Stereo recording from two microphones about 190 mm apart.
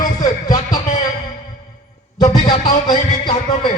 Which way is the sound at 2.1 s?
20° left (ahead or behind).